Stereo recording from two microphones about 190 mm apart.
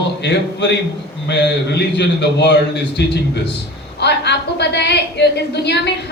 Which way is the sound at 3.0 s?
65° left (ahead or behind).